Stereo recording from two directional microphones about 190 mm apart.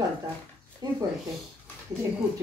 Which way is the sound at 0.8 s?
20° right (ahead or behind).